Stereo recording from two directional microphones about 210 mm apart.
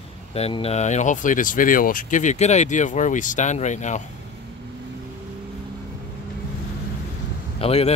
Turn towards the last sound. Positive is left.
turn(degrees=30)  # may be behind; listen again after turning